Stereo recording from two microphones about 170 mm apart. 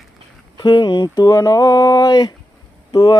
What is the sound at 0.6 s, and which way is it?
Speech, 25° left (ahead or behind).